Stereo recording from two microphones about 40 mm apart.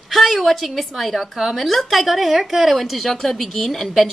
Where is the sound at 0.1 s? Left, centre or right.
Centre.